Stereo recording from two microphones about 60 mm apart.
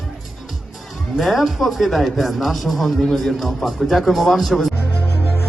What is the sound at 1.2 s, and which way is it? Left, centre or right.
A man's voice, centre.